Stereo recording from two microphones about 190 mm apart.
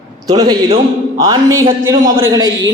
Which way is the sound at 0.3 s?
20° right (ahead or behind).